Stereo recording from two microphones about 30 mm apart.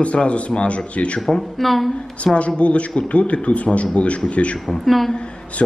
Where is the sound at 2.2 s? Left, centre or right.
Left.